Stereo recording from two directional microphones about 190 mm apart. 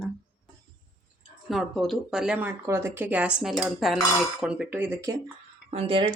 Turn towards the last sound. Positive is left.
turn(degrees=-30)  # may be behind; listen again after turning